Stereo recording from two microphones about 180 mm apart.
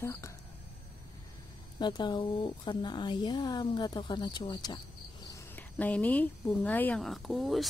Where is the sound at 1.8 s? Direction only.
25° left (ahead or behind).